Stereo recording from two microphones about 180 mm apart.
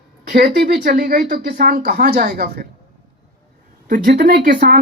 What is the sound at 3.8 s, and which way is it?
Speech, 50° right (ahead or behind).